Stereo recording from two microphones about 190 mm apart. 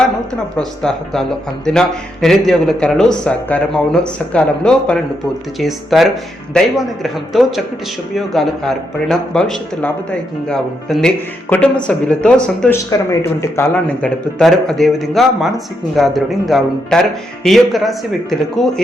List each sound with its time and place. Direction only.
0.5 s speech: 5° left (ahead or behind)
12.9 s speech: 15° left (ahead or behind)